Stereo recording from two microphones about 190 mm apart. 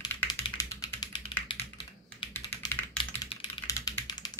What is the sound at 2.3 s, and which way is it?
Computer keyboard, 10° left (ahead or behind).